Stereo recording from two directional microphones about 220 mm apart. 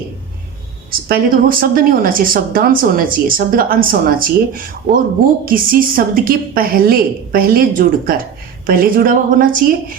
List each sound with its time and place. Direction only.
1.0 s a woman's voice: 40° right (ahead or behind)